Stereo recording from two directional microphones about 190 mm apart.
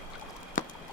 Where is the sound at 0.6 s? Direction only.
45° left (ahead or behind).